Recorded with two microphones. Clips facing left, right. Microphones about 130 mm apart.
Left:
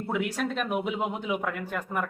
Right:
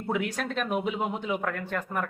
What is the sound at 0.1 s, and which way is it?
A man's voice, 5° left (ahead or behind).